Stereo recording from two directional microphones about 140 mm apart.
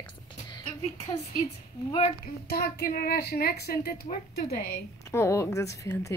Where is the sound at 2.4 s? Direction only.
90° left.